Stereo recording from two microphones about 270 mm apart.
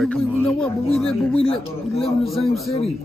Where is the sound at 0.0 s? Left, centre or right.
Centre.